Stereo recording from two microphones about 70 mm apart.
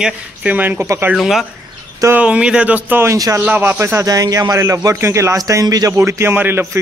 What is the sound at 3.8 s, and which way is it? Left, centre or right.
Speech, right.